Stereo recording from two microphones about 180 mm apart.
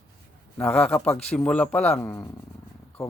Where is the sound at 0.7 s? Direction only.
5° left (ahead or behind).